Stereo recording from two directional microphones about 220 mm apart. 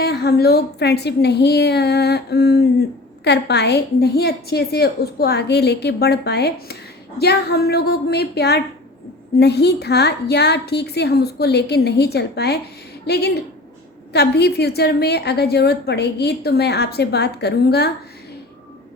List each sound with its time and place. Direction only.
0.0 s a woman's voice: 45° left (ahead or behind)